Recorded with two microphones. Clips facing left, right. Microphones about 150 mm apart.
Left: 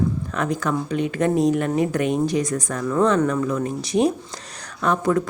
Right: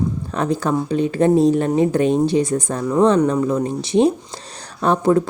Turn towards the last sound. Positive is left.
turn(degrees=-30)  # may be behind; listen again after turning